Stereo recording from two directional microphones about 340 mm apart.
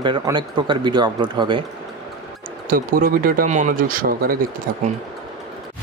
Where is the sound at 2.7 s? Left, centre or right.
Right.